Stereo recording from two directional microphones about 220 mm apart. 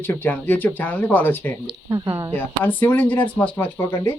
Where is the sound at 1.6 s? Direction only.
20° right (ahead or behind).